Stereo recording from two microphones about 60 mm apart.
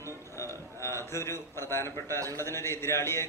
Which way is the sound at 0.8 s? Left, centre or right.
Left.